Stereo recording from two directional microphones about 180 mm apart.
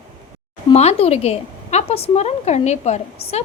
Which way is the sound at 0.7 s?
35° left (ahead or behind).